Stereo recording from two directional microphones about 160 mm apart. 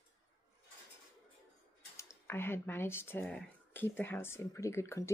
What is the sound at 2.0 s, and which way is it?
Speech, 15° left (ahead or behind).